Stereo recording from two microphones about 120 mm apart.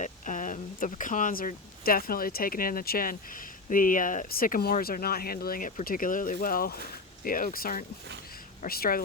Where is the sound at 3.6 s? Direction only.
90° left.